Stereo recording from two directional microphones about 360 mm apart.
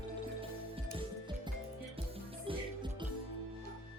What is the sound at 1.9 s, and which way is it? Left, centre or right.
Music, centre.